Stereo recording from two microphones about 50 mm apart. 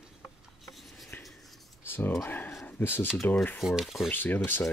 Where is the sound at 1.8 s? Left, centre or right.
Left.